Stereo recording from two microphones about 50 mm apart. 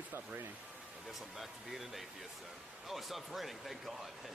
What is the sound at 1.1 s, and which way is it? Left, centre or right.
Speech, centre.